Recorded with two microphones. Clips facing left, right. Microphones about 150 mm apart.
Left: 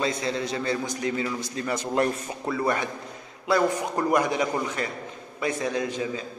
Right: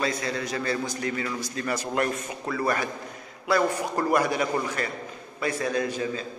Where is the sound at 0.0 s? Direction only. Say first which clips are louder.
Left 1 dB; 25° left (ahead or behind).